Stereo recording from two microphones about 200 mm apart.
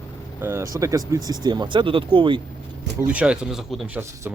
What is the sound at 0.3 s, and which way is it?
Speech, 10° right (ahead or behind).